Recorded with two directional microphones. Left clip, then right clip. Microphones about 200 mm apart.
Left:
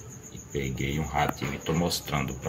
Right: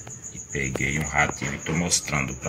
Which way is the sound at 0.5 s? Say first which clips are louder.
Right 5 dB; centre (ahead or behind).